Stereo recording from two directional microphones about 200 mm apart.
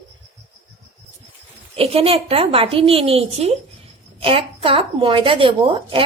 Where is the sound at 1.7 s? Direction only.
30° right (ahead or behind).